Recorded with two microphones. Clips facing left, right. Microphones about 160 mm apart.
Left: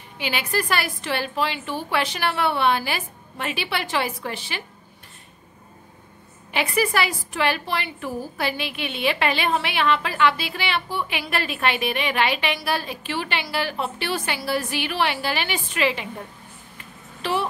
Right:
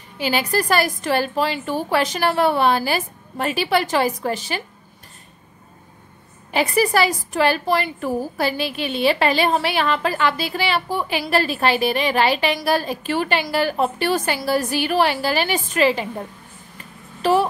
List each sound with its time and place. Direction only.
0.2 s a woman's voice: 40° right (ahead or behind)
6.5 s a woman's voice: 40° right (ahead or behind)
16.7 s a sound: 40° right (ahead or behind)